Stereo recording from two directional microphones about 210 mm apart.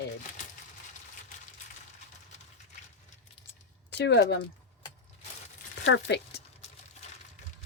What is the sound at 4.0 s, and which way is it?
Speech, 55° left (ahead or behind).